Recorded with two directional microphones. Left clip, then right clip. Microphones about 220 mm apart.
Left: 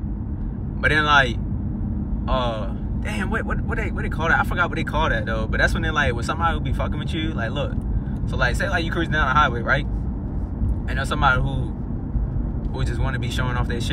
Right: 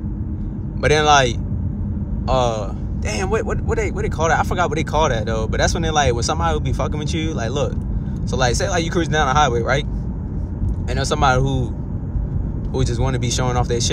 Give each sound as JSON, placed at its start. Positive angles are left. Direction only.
{"t": 0.8, "sound": "speech", "side_deg": -20}
{"t": 11.0, "sound": "speech", "side_deg": -25}
{"t": 12.7, "sound": "speech", "side_deg": -25}